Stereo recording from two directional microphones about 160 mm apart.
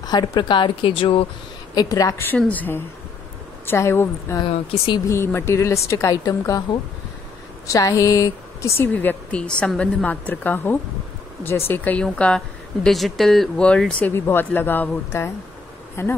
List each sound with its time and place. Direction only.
0.0 s speech: 25° left (ahead or behind)
1.8 s speech: 25° left (ahead or behind)
4.5 s speech: 35° left (ahead or behind)
5.0 s a woman's voice: 15° left (ahead or behind)